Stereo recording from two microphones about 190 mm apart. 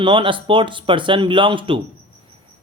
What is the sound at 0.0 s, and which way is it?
Speech, 25° right (ahead or behind).